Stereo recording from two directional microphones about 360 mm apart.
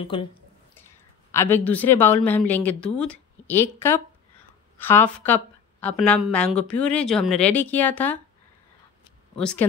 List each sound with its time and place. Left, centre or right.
0.0 s speech: centre
1.3 s a woman's voice: centre
9.4 s a woman's voice: centre